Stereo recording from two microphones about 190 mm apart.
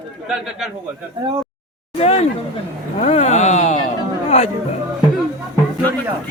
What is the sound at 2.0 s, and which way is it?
Speech, 30° left (ahead or behind).